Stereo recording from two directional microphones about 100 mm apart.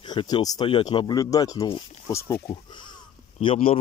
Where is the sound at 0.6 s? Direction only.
65° left (ahead or behind); by 2.4 s 30° left (ahead or behind).